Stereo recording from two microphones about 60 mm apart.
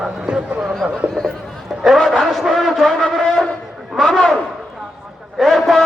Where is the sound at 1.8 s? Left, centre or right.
Centre.